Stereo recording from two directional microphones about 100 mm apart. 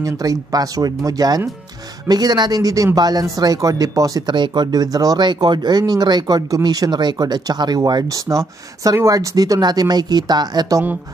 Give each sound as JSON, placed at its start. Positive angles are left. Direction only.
{"t": 0.0, "sound": "speech", "side_deg": -35}
{"t": 4.3, "sound": "speech", "side_deg": -50}